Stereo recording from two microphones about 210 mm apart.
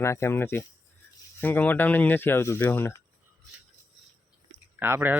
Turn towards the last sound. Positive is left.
turn(degrees=-10)  # may be behind; listen again after turning